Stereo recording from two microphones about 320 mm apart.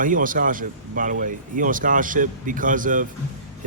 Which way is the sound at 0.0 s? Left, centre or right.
Right.